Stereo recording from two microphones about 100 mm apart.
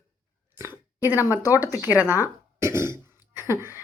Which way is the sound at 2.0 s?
20° right (ahead or behind).